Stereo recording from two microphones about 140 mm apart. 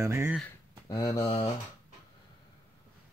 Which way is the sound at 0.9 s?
25° left (ahead or behind).